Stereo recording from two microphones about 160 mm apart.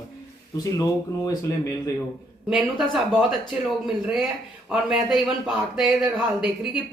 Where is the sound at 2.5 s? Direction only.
Centre (ahead or behind).